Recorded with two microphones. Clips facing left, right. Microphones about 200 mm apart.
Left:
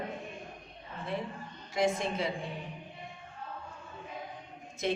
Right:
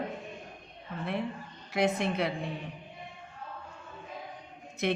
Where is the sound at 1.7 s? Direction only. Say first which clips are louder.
Right 2 dB; 65° right (ahead or behind).